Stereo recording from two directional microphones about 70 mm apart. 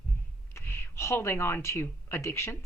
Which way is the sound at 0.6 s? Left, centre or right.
Left.